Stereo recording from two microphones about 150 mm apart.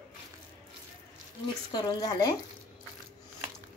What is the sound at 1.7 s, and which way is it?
Speech, 25° left (ahead or behind).